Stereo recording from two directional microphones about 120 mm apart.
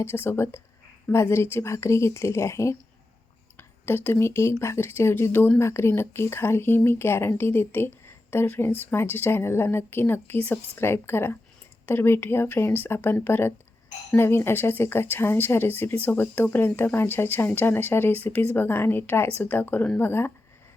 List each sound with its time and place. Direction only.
0.0 s speech: 20° left (ahead or behind)